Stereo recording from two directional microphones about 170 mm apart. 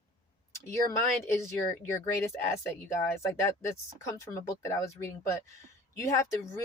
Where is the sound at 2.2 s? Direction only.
15° left (ahead or behind).